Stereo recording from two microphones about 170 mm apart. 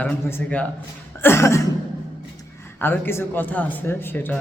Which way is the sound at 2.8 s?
15° left (ahead or behind).